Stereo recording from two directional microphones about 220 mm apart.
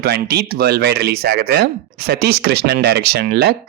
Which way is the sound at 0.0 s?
45° right (ahead or behind).